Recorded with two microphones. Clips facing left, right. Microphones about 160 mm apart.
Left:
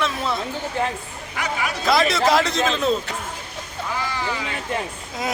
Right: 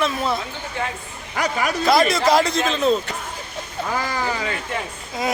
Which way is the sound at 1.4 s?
40° right (ahead or behind).